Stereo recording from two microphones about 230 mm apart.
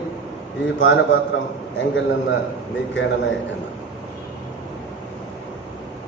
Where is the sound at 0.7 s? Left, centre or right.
Left.